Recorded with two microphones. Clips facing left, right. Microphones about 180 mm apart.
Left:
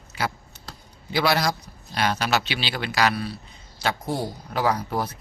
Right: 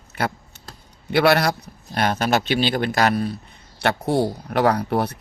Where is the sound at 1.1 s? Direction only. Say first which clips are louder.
Right 5 dB; 60° right (ahead or behind); by 3.3 s 45° right (ahead or behind).